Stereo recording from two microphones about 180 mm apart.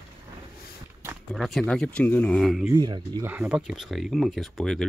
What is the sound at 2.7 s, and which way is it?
Speech, 25° right (ahead or behind).